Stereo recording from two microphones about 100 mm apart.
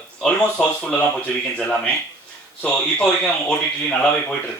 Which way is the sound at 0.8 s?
10° left (ahead or behind).